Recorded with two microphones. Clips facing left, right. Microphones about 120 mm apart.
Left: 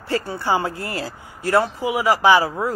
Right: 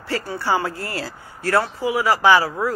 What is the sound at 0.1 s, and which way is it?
A woman's voice, 20° left (ahead or behind).